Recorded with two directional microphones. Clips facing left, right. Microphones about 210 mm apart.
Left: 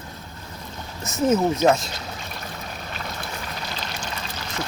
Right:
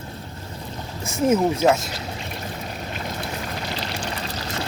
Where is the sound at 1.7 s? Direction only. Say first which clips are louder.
Right 1 dB; 25° right (ahead or behind).